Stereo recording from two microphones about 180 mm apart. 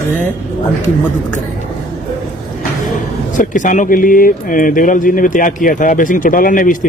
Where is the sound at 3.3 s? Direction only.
45° left (ahead or behind).